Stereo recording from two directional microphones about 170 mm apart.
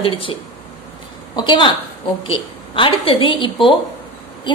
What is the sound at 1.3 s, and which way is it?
A woman's voice, 25° left (ahead or behind).